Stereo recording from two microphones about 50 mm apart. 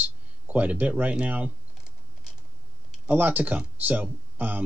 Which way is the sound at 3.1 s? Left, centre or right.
Right.